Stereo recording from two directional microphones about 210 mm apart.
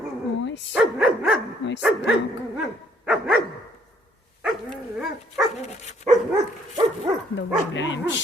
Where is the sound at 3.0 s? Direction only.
5° right (ahead or behind).